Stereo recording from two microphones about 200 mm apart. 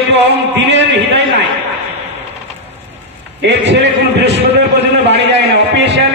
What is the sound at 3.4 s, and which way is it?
Speech, 60° right (ahead or behind).